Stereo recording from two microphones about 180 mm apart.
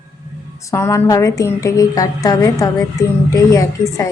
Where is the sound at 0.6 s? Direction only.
15° left (ahead or behind).